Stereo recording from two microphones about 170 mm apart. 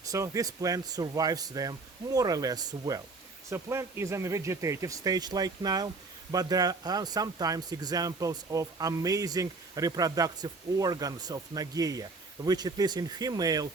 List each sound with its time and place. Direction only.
0.0 s speech: 20° right (ahead or behind)